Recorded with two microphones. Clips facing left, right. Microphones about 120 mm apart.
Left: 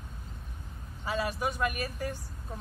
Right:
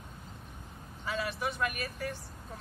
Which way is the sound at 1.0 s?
35° left (ahead or behind).